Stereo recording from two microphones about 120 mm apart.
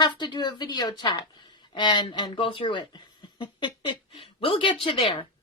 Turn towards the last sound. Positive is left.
turn(degrees=50)  # may be behind; listen again after turning